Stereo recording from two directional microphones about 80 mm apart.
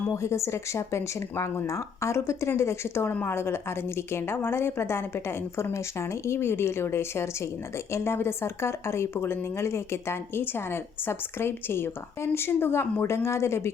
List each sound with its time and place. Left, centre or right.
0.1 s speech: left